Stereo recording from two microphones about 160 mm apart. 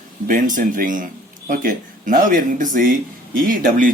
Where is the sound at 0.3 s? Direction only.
55° right (ahead or behind).